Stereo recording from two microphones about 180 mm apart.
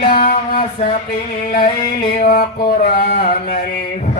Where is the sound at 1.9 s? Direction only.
55° left (ahead or behind).